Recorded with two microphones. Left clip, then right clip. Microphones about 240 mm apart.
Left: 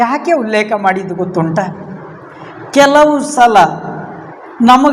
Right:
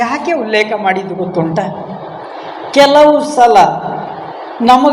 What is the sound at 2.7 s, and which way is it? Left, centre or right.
A man's voice, left.